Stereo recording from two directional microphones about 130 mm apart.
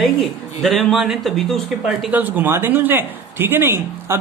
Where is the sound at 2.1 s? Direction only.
15° right (ahead or behind).